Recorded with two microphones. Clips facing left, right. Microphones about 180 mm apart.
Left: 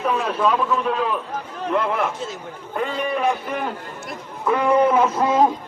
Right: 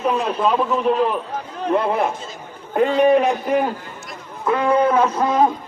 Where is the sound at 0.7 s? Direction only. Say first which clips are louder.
Right 4 dB; 30° right (ahead or behind).